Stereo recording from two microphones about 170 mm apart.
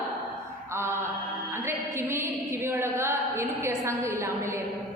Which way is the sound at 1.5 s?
15° right (ahead or behind).